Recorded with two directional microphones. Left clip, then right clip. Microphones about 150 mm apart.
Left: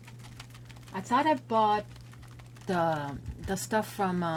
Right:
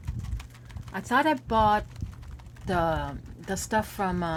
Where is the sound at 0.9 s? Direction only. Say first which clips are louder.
Right 2 dB; 30° right (ahead or behind).